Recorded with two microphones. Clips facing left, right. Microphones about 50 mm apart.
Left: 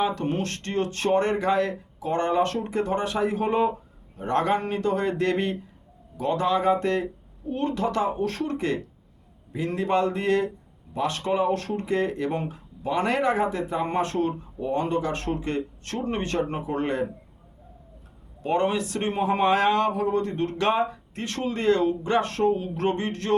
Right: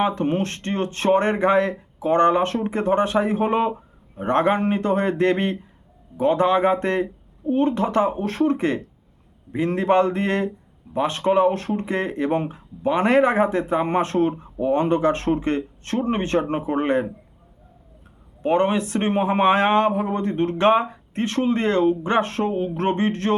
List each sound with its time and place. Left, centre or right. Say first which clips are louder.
0.0 s speech: right 4 dB; right
18.4 s speech: right 4 dB; right